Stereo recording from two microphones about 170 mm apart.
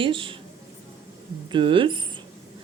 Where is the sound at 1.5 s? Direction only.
30° right (ahead or behind).